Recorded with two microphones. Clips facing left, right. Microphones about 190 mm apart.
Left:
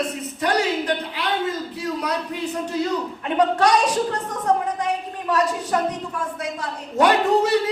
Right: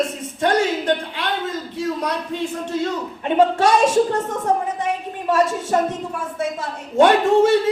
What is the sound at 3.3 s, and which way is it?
A woman's voice, 25° right (ahead or behind).